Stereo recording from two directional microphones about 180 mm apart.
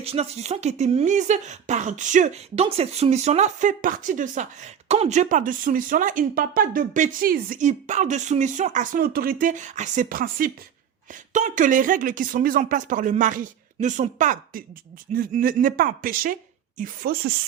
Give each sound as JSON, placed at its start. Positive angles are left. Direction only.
{"t": 0.0, "sound": "speech", "side_deg": -35}